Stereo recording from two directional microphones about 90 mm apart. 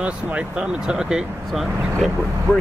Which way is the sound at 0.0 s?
15° right (ahead or behind).